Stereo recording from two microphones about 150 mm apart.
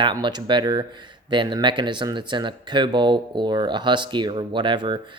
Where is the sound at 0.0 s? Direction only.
30° right (ahead or behind).